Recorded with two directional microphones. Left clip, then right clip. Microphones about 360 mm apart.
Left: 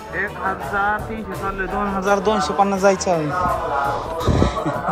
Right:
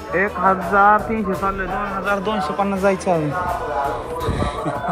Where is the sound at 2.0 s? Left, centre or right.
Centre.